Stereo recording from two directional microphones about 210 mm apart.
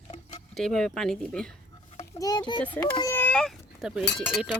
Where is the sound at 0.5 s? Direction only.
Centre (ahead or behind).